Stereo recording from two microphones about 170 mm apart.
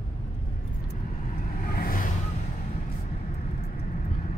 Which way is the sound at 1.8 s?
60° left (ahead or behind).